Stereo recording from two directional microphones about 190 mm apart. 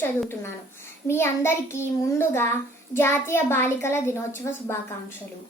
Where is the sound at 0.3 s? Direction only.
15° left (ahead or behind).